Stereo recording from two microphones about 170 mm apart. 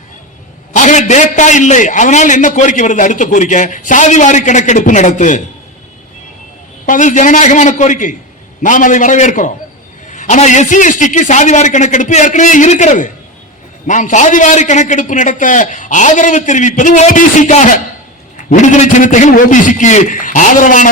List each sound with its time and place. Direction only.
0.7 s a man's voice: 45° left (ahead or behind)
6.8 s a man's voice: 50° left (ahead or behind)